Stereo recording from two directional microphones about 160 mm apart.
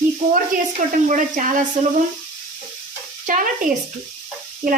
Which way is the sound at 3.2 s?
55° right (ahead or behind).